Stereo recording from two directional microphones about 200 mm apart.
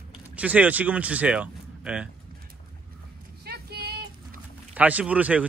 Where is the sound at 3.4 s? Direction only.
50° right (ahead or behind).